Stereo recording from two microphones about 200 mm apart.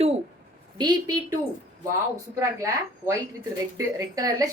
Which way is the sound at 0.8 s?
20° right (ahead or behind).